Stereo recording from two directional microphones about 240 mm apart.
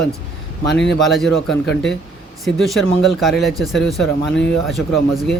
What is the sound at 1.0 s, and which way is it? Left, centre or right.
Speech, centre.